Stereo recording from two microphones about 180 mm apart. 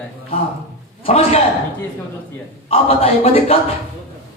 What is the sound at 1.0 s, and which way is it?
Speech, 35° left (ahead or behind).